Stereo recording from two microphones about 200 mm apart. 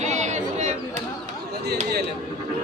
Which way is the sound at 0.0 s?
35° right (ahead or behind).